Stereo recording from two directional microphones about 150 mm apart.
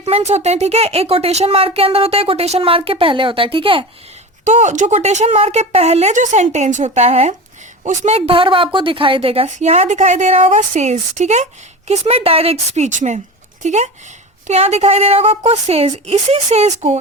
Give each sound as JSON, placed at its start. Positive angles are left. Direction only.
{"t": 0.0, "sound": "a woman's voice", "side_deg": -45}
{"t": 4.4, "sound": "a woman's voice", "side_deg": -55}